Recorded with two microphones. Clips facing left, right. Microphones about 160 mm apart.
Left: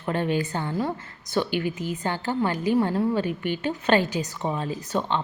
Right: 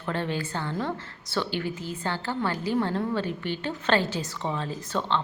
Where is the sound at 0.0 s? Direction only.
15° left (ahead or behind).